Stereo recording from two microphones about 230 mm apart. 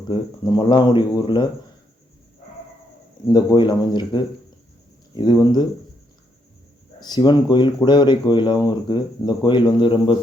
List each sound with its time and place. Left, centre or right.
0.1 s speech: centre
3.2 s speech: centre
7.0 s speech: centre